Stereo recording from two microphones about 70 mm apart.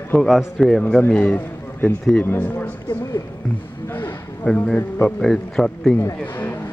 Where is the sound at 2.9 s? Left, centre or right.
Left.